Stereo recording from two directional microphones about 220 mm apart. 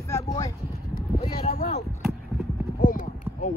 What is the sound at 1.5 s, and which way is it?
Speech, 30° left (ahead or behind).